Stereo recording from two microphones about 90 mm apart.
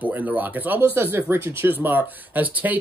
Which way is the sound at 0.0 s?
20° right (ahead or behind).